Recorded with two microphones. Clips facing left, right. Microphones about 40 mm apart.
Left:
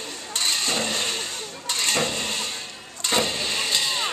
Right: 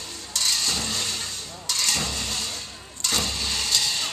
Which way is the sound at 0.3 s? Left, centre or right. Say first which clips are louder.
Left 1 dB; left.